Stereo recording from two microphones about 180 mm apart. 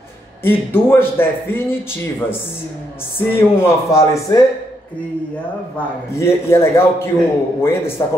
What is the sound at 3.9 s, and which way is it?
Speech, 15° left (ahead or behind).